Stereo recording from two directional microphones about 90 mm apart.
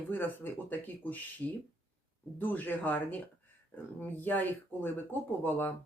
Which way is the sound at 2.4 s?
20° left (ahead or behind).